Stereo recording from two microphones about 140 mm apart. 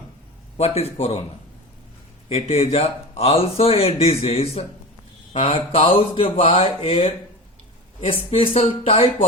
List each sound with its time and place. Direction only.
0.5 s speech: 45° left (ahead or behind)
2.3 s speech: 45° left (ahead or behind)